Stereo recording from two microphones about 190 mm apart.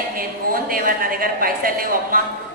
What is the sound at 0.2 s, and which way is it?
A woman's voice, 50° right (ahead or behind).